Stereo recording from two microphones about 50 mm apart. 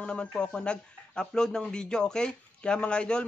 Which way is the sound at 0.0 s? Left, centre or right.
Centre.